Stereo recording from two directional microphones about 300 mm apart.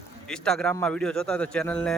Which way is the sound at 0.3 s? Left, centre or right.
Centre.